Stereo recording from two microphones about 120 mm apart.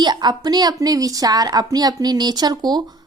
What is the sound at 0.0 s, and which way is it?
A woman's voice, 35° right (ahead or behind).